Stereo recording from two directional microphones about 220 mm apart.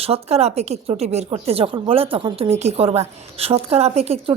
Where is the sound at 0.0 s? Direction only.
25° right (ahead or behind).